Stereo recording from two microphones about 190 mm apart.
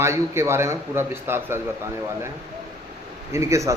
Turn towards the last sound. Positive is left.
turn(degrees=-15)  # may be behind; listen again after turning